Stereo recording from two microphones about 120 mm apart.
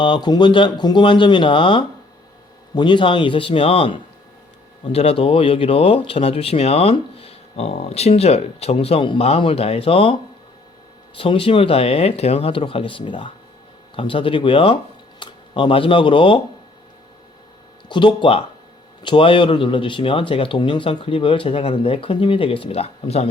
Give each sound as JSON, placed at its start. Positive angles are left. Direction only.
{"t": 0.0, "sound": "speech", "side_deg": 40}
{"t": 17.8, "sound": "speech", "side_deg": 40}